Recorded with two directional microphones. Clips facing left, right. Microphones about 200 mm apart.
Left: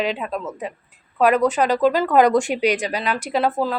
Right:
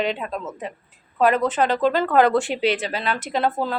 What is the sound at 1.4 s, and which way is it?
Speech, 10° left (ahead or behind).